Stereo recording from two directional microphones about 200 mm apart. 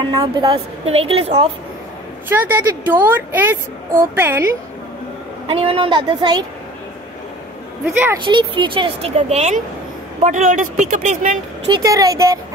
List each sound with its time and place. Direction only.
0.0 s a woman's voice: 25° right (ahead or behind)
2.2 s a woman's voice: 10° right (ahead or behind)
5.5 s a woman's voice: 25° right (ahead or behind)
7.8 s a woman's voice: 10° right (ahead or behind)
8.2 s a woman's voice: 25° right (ahead or behind); by 11.3 s 40° right (ahead or behind)
11.7 s a woman's voice: 15° right (ahead or behind)